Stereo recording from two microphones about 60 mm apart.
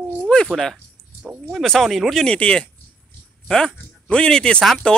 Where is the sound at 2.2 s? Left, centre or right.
Centre.